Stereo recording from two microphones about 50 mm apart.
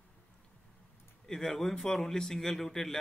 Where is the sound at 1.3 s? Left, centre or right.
Centre.